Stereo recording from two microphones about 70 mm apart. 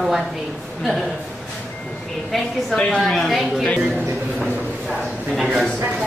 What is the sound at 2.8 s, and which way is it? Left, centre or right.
Speech, centre.